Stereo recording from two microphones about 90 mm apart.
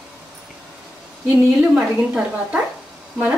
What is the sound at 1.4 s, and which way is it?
A woman's voice, 10° right (ahead or behind).